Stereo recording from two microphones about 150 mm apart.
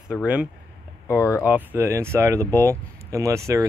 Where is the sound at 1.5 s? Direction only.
15° right (ahead or behind).